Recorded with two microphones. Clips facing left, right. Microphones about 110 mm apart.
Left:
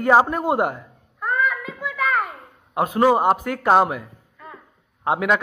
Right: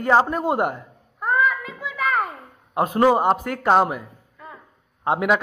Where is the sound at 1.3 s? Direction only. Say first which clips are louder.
Right 2 dB; 15° right (ahead or behind).